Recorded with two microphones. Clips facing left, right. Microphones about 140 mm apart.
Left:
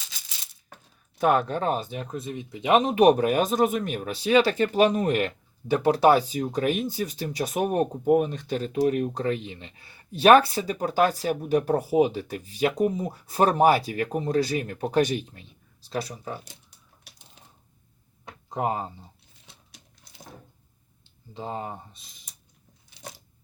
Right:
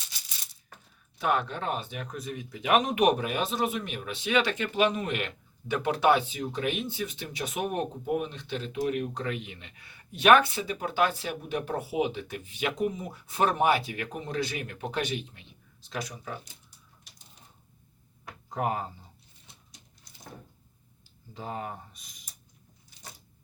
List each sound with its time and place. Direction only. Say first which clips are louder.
1.2 s speech: left 6 dB; 45° left (ahead or behind)
18.3 s a sound: left 3 dB; 20° left (ahead or behind)
21.0 s speech: left 4 dB; 25° left (ahead or behind)